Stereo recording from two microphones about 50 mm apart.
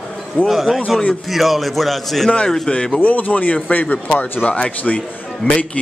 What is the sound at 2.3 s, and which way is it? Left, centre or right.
Speech, centre.